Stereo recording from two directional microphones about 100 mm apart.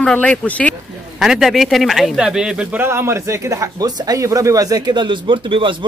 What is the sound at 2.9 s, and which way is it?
Speech, 25° right (ahead or behind).